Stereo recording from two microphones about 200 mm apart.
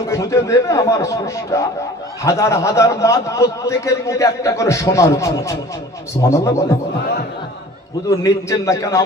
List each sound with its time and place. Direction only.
0.1 s a man's voice: 15° left (ahead or behind)
8.1 s a man's voice: 15° left (ahead or behind)